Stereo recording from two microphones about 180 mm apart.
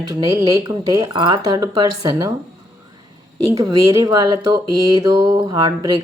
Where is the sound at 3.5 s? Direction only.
20° right (ahead or behind).